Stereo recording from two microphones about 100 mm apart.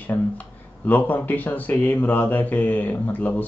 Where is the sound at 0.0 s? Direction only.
15° left (ahead or behind).